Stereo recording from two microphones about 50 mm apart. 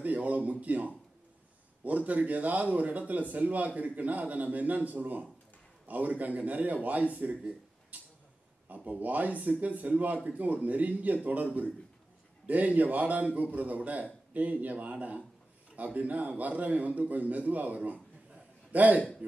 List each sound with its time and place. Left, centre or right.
0.0 s a man's voice: right
7.9 s a sound: right
8.6 s a man's voice: right
12.4 s a man's voice: right